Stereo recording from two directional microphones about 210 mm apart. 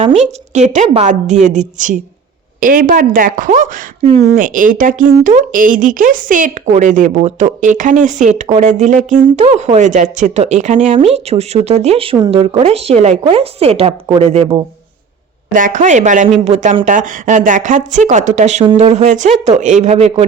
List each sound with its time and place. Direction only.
0.2 s speech: 35° right (ahead or behind)
15.5 s speech: 40° right (ahead or behind)